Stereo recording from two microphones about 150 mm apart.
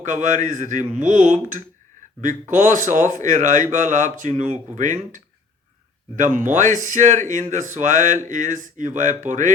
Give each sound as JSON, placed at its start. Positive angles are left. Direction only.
{"t": 0.0, "sound": "a man's voice", "side_deg": -55}